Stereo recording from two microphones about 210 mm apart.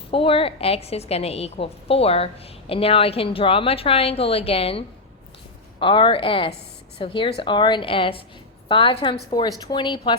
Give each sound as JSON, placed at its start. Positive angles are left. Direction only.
{"t": 0.1, "sound": "a woman's voice", "side_deg": 25}
{"t": 5.8, "sound": "a woman's voice", "side_deg": 25}